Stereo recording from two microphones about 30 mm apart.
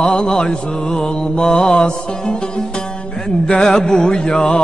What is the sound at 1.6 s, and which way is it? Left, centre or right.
Music, left.